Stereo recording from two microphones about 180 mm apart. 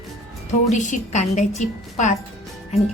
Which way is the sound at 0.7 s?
40° left (ahead or behind).